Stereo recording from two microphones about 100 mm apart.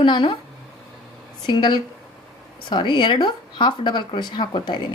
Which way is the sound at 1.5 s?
50° left (ahead or behind).